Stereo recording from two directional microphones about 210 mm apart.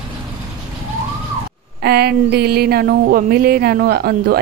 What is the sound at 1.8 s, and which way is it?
Speech, 50° right (ahead or behind).